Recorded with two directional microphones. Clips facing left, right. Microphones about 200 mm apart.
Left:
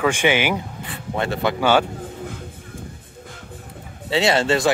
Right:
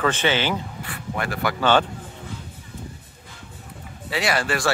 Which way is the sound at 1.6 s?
10° left (ahead or behind).